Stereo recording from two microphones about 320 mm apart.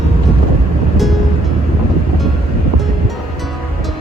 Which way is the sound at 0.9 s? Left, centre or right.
Centre.